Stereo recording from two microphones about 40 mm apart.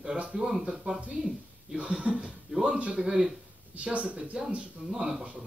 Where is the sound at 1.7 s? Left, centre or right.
Right.